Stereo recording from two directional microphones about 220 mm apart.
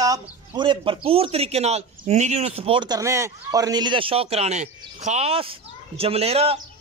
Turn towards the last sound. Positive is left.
turn(degrees=-30)  # may be behind; listen again after turning